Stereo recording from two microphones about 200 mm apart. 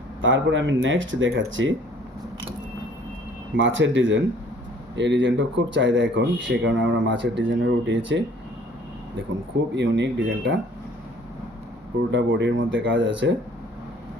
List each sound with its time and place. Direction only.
0.2 s speech: 70° right (ahead or behind)
3.5 s speech: 70° right (ahead or behind)
9.7 s speech: 65° right (ahead or behind)
12.1 s speech: 65° right (ahead or behind)